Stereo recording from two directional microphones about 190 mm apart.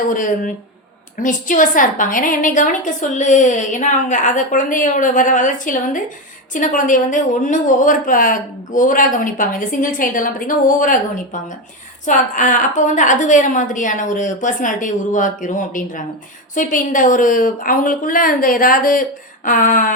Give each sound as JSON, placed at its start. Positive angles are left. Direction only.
{"t": 0.1, "sound": "a woman's voice", "side_deg": 45}
{"t": 12.0, "sound": "a woman's voice", "side_deg": 40}